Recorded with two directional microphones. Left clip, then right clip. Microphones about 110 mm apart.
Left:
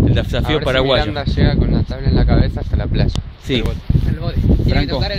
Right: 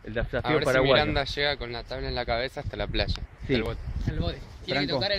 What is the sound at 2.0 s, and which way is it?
Speech, 60° right (ahead or behind).